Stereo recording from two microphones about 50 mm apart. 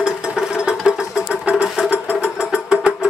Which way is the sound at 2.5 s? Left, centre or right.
Right.